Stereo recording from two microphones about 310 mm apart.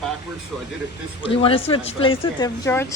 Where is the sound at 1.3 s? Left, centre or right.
Centre.